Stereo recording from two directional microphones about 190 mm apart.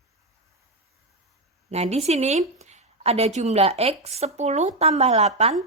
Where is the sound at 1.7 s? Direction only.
35° right (ahead or behind).